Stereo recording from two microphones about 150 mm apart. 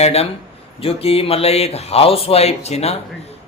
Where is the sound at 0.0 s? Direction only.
45° left (ahead or behind).